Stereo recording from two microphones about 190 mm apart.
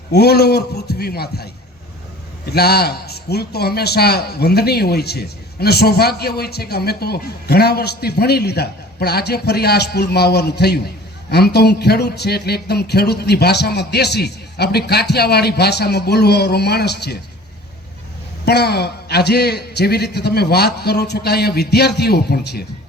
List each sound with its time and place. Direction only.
0.1 s a man's voice: 55° left (ahead or behind)
2.5 s a man's voice: 55° left (ahead or behind)
18.4 s a man's voice: 60° left (ahead or behind)